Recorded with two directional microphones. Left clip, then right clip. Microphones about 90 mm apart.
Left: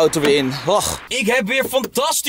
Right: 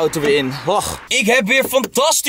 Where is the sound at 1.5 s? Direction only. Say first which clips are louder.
Right 3 dB; 25° right (ahead or behind).